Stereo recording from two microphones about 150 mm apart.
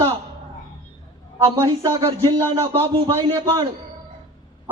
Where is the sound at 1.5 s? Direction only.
25° right (ahead or behind).